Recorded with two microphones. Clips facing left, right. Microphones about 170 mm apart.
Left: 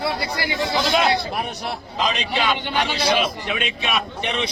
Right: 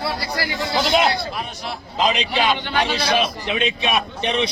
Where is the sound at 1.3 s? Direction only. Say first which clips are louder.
Left 3 dB; 55° left (ahead or behind).